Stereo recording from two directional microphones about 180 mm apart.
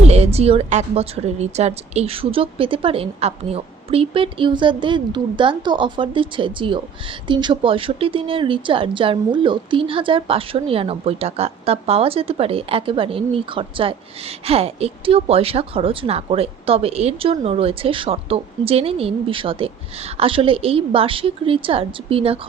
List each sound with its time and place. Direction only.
0.1 s a woman's voice: 35° right (ahead or behind)